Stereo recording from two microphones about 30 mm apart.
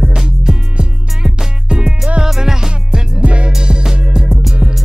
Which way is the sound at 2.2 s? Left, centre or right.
Centre.